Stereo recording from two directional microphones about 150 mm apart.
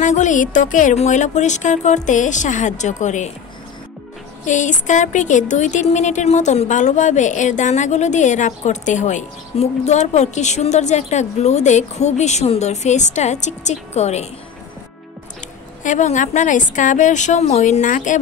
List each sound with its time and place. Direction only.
0.0 s speech: 55° left (ahead or behind)
4.5 s a woman's voice: 55° left (ahead or behind)
15.8 s speech: 55° left (ahead or behind)